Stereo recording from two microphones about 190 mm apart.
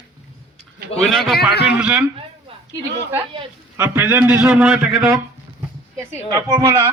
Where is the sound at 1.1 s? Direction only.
Centre (ahead or behind).